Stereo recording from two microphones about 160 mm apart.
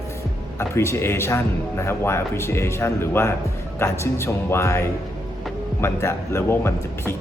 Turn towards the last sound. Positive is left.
turn(degrees=15)  # may be behind; listen again after turning